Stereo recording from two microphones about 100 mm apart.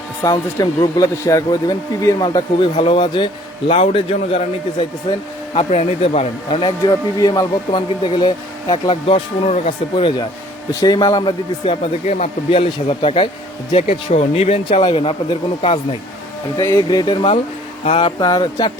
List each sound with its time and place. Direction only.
0.3 s a man's voice: 35° left (ahead or behind)
2.1 s speech: 45° left (ahead or behind)
3.7 s speech: 80° left
6.6 s speech: 50° left (ahead or behind)
8.0 s speech: 60° left (ahead or behind)
10.7 s a man's voice: 35° left (ahead or behind)
10.9 s speech: 45° left (ahead or behind)
11.6 s speech: 85° left; by 13.2 s 70° left (ahead or behind)
13.7 s speech: 90° left; by 15.8 s 65° left (ahead or behind)
16.6 s a man's voice: 40° left (ahead or behind)
17.8 s speech: 75° left (ahead or behind)
18.2 s speech: 45° left (ahead or behind)